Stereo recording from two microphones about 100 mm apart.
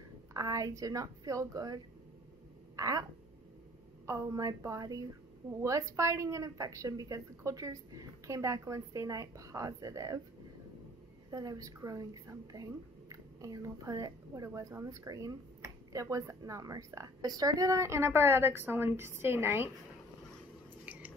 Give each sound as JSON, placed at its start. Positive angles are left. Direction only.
{"t": 0.3, "sound": "a woman's voice", "side_deg": -35}
{"t": 11.2, "sound": "a woman's voice", "side_deg": -40}
{"t": 20.8, "sound": "biting", "side_deg": -15}